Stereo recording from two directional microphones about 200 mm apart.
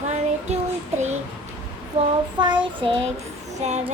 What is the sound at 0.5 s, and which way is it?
Child singing, 35° right (ahead or behind).